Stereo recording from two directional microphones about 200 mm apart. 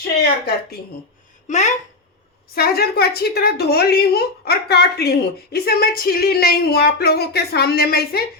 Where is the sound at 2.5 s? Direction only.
50° left (ahead or behind).